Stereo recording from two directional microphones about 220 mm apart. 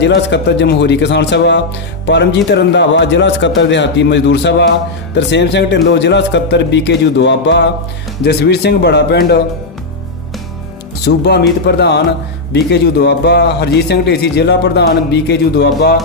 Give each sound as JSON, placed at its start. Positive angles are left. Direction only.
{"t": 0.0, "sound": "a man's voice", "side_deg": 50}
{"t": 11.0, "sound": "a man's voice", "side_deg": 50}